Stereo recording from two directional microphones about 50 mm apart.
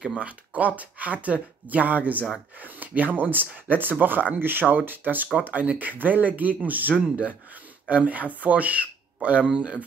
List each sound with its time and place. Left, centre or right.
0.2 s speech: right